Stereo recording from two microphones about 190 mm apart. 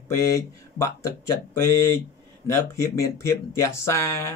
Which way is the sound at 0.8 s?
15° left (ahead or behind).